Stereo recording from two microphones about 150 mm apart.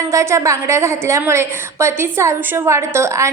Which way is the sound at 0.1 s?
20° right (ahead or behind).